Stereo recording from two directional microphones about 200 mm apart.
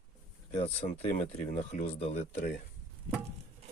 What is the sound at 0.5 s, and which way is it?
Speech, 35° left (ahead or behind).